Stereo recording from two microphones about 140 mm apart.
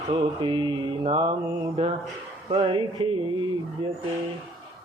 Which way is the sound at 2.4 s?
40° right (ahead or behind).